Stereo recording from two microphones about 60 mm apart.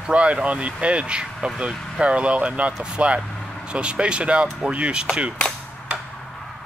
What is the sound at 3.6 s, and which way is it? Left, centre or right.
Speech, centre.